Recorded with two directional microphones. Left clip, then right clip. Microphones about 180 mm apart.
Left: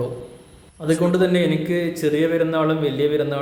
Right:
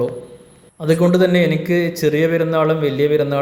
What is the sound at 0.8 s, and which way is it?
A man's voice, 25° right (ahead or behind).